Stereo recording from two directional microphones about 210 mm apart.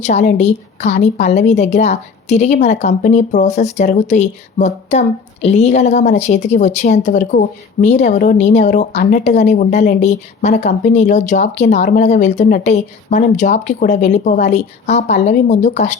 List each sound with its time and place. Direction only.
0.0 s a woman's voice: 35° left (ahead or behind)